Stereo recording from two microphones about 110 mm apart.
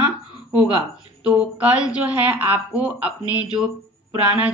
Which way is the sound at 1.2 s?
10° right (ahead or behind).